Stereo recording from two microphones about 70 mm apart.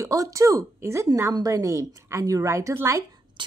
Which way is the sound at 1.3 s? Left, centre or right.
Right.